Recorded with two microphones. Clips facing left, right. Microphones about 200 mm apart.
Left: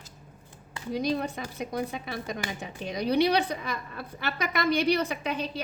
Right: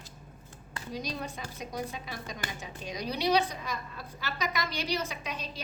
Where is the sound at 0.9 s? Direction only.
60° left (ahead or behind).